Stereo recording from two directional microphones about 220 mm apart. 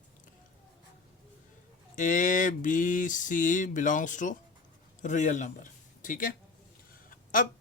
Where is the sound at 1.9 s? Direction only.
35° left (ahead or behind).